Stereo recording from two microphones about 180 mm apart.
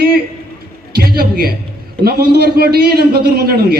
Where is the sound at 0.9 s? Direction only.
60° right (ahead or behind).